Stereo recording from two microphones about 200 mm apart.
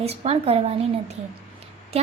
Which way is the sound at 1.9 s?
30° right (ahead or behind).